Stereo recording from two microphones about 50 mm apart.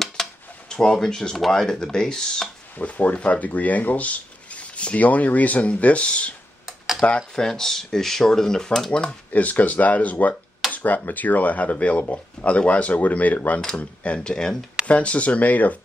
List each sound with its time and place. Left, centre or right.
0.2 s a sound: centre
0.7 s speech: centre
2.8 s speech: left; by 8.9 s centre
9.3 s speech: left; by 14.6 s centre
14.9 s speech: left